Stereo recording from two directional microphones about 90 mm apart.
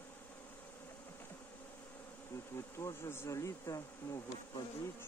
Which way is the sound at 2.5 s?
30° left (ahead or behind).